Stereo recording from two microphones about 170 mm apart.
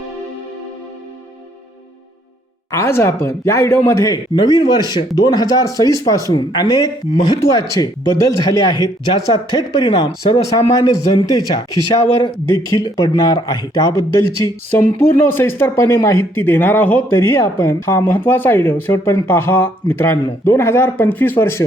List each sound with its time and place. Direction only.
2.7 s speech: 15° left (ahead or behind)